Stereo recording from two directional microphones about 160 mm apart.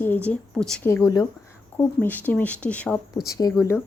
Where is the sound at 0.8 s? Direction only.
15° left (ahead or behind).